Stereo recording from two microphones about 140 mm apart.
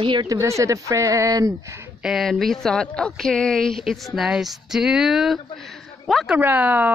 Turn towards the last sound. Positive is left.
turn(degrees=-10)  # may be behind; listen again after turning